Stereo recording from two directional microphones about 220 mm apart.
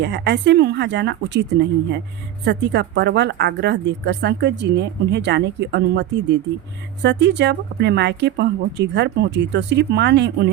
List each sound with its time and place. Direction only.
0.0 s a woman's voice: 50° right (ahead or behind)